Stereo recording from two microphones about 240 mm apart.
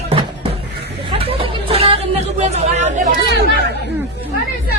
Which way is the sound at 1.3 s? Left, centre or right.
Right.